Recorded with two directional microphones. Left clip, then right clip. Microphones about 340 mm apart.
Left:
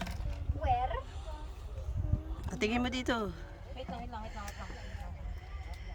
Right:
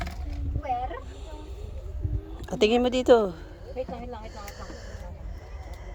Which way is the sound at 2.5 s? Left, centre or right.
Centre.